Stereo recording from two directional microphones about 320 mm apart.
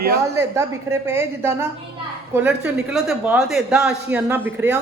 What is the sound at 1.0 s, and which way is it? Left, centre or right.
A woman's voice, centre.